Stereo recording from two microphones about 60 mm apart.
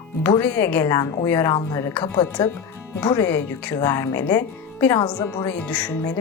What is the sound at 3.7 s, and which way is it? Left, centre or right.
Speech, left.